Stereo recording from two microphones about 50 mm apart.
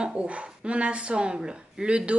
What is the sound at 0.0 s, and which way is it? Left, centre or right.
Speech, right.